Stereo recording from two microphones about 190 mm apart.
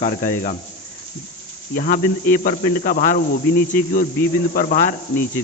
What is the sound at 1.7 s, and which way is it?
A man's voice, 50° left (ahead or behind).